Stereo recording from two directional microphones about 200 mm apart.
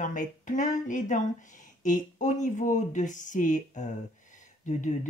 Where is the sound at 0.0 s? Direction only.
40° left (ahead or behind).